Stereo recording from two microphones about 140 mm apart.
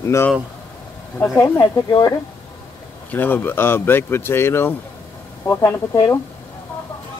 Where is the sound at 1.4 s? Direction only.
25° left (ahead or behind).